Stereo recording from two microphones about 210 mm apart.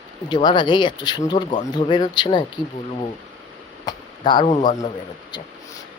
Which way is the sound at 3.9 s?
20° left (ahead or behind).